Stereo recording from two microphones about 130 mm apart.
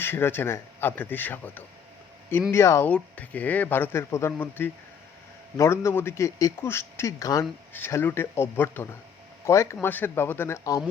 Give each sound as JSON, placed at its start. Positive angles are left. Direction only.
{"t": 0.0, "sound": "a man's voice", "side_deg": 15}